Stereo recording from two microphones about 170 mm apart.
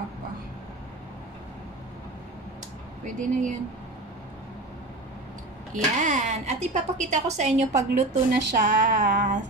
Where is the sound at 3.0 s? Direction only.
45° right (ahead or behind).